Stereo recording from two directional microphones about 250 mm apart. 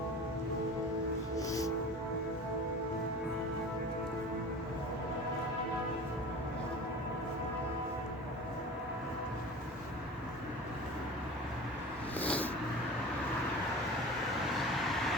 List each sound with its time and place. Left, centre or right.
1.4 s music: centre
12.2 s vehicle: centre